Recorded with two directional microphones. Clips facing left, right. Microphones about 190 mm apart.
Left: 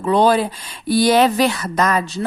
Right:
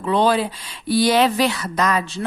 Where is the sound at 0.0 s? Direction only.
45° left (ahead or behind).